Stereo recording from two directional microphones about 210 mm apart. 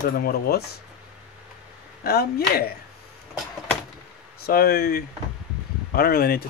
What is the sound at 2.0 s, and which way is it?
Speech, 45° left (ahead or behind).